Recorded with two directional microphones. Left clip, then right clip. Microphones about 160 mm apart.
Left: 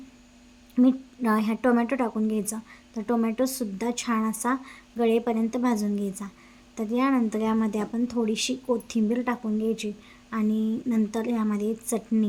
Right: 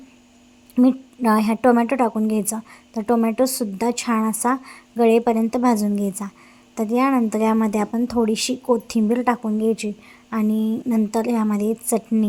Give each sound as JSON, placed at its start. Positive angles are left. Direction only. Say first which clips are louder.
{"t": 0.8, "sound": "a woman's voice", "louder": "right 5 dB", "side_deg": -20}